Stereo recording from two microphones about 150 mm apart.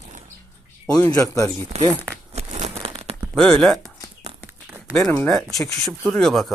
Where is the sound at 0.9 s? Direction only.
20° left (ahead or behind).